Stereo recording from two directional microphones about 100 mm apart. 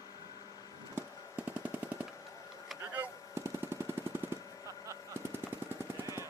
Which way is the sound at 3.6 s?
20° right (ahead or behind).